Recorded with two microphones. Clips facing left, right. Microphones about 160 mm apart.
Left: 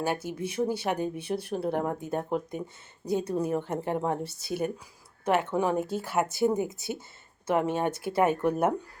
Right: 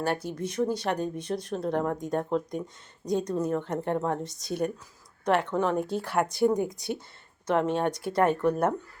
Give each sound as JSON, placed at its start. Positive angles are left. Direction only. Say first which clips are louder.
{"t": 0.0, "sound": "speech", "louder": "right 1 dB", "side_deg": 5}